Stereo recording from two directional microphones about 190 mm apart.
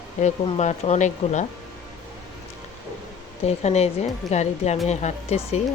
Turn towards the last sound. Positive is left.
turn(degrees=35)  # may be behind; listen again after turning